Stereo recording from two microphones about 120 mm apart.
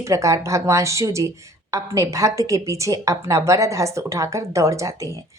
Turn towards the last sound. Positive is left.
turn(degrees=-25)  # may be behind; listen again after turning